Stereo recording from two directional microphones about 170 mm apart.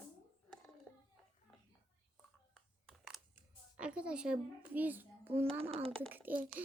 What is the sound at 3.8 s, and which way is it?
A child's voice, 5° right (ahead or behind).